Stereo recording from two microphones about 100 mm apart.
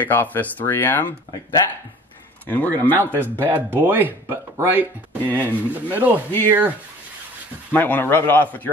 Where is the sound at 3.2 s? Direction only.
20° right (ahead or behind).